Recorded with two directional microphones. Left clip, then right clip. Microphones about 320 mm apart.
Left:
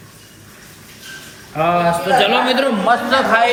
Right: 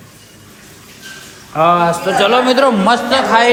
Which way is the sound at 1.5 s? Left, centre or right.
Centre.